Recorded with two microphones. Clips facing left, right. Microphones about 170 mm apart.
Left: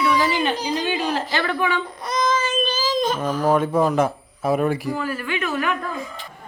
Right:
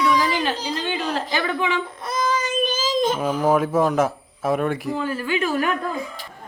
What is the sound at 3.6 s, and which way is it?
A man's voice, centre (ahead or behind).